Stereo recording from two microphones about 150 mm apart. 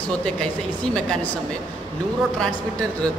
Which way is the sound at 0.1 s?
5° left (ahead or behind).